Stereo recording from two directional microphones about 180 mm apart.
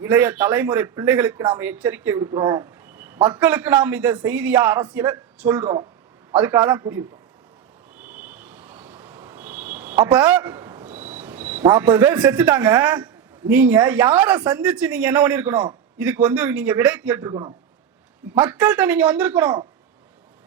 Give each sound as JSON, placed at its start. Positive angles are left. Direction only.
{"t": 0.0, "sound": "speech", "side_deg": -10}
{"t": 2.9, "sound": "a sound", "side_deg": -10}
{"t": 3.3, "sound": "speech", "side_deg": -10}
{"t": 7.9, "sound": "vehicle", "side_deg": -10}
{"t": 13.5, "sound": "speech", "side_deg": -10}
{"t": 18.3, "sound": "speech", "side_deg": -10}